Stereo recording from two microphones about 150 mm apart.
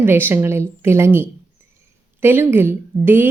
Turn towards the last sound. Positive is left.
turn(degrees=-15)  # may be behind; listen again after turning